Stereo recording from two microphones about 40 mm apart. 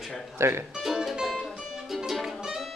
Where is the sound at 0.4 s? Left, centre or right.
Right.